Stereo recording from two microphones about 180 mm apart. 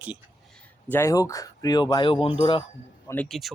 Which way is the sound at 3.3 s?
Centre (ahead or behind).